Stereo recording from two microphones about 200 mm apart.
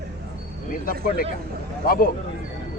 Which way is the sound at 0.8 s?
45° left (ahead or behind).